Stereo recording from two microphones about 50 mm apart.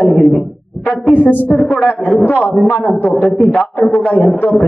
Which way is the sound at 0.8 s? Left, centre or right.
Left.